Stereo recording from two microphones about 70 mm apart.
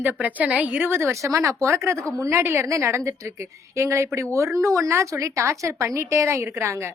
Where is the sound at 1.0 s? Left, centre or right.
Right.